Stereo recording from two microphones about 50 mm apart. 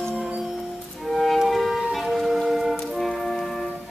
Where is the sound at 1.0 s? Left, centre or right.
Centre.